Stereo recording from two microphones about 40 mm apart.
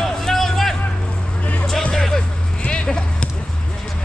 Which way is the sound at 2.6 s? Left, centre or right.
Left.